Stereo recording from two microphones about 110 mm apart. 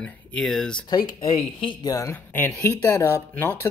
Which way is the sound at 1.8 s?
30° left (ahead or behind).